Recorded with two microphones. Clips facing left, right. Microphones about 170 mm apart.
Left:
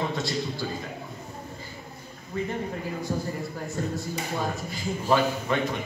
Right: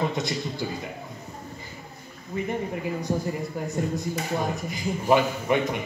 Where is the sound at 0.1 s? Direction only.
20° right (ahead or behind).